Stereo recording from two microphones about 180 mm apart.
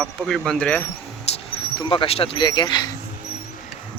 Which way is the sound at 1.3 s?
35° left (ahead or behind).